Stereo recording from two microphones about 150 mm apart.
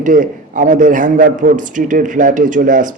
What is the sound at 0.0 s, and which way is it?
A man's voice, 60° right (ahead or behind).